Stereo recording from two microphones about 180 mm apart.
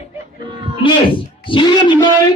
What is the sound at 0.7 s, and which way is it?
Speech, 30° left (ahead or behind).